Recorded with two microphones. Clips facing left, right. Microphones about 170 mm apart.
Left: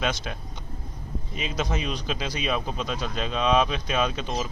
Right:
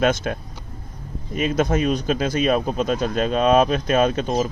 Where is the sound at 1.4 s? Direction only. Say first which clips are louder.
Right 10 dB; 50° right (ahead or behind).